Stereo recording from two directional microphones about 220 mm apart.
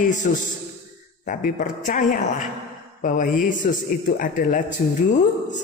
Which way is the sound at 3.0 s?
35° left (ahead or behind).